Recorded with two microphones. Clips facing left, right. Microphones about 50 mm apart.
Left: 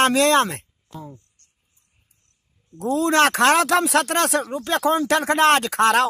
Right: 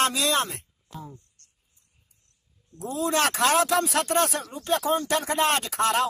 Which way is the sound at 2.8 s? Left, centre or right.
Left.